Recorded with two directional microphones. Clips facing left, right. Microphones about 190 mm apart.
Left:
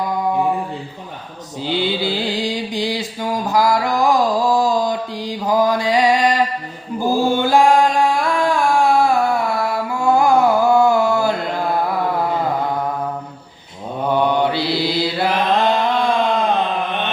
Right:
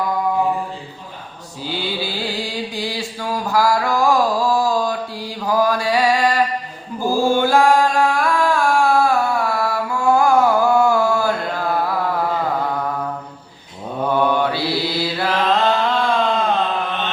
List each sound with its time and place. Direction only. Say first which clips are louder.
1.6 s mantra: left 5 dB; 20° left (ahead or behind)
7.0 s chant: even; 20° left (ahead or behind)
10.2 s carnatic music: left 1 dB; 20° left (ahead or behind)
14.1 s mantra: left 1 dB; 20° left (ahead or behind)